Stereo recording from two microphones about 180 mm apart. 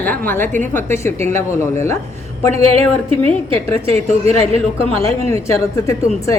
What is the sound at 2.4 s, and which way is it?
Speech, 35° right (ahead or behind).